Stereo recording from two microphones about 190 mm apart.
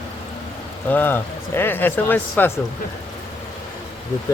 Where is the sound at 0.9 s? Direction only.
10° left (ahead or behind).